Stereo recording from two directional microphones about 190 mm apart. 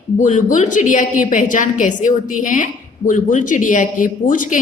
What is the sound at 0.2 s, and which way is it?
A woman's voice, 40° left (ahead or behind).